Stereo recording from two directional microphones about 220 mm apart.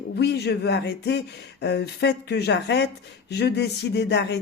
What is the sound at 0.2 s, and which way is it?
Speech, 50° left (ahead or behind).